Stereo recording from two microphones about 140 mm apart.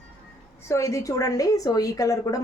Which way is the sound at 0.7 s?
20° left (ahead or behind).